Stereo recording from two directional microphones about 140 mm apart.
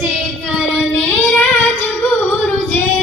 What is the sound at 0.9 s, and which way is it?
Child singing, 10° left (ahead or behind).